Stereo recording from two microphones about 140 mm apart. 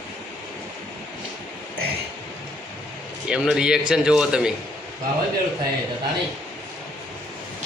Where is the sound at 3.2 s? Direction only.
5° right (ahead or behind).